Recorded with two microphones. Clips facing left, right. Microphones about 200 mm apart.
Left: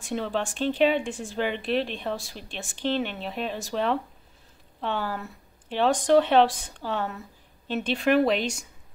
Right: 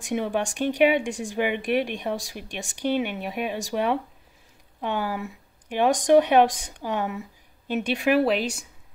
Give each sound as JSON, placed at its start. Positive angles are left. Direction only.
{"t": 0.0, "sound": "speech", "side_deg": -15}